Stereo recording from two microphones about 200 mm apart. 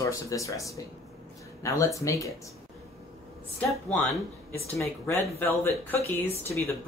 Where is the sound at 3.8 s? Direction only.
10° left (ahead or behind).